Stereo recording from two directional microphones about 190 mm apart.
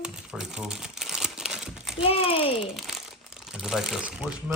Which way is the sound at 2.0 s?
30° left (ahead or behind).